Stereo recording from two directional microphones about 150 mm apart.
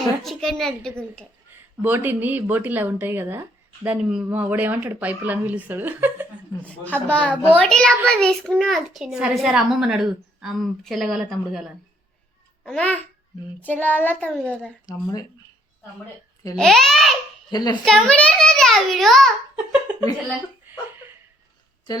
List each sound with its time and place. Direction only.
0.2 s a child's voice: centre (ahead or behind)
1.8 s speech: 15° right (ahead or behind)
6.6 s a child's voice: 10° left (ahead or behind)
12.6 s child singing: 10° left (ahead or behind)
14.8 s speech: 25° left (ahead or behind)
16.6 s a child's voice: 5° left (ahead or behind)
17.5 s speech: 30° left (ahead or behind)
17.8 s a child's voice: 5° left (ahead or behind)
20.7 s a sound: 10° right (ahead or behind)